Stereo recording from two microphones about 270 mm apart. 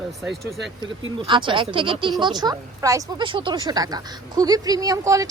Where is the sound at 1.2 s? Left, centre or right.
Centre.